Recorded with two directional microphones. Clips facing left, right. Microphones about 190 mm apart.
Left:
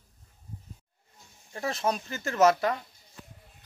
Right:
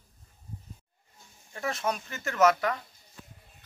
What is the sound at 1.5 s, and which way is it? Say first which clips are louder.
Speech: left 2 dB; 30° left (ahead or behind).